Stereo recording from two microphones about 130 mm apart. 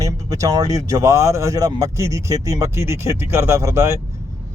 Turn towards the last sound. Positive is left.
turn(degrees=-20)  # may be behind; listen again after turning